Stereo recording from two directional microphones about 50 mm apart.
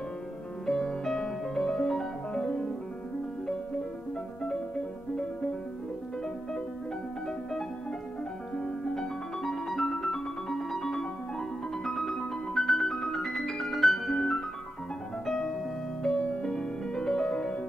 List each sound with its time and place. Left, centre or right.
0.7 s music: centre
8.5 s music: centre
14.1 s music: centre
16.0 s music: left